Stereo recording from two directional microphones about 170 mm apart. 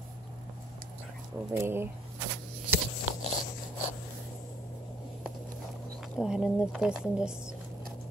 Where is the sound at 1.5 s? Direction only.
15° right (ahead or behind).